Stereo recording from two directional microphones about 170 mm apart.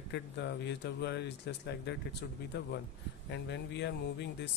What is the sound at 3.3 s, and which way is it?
Speech, 90° left.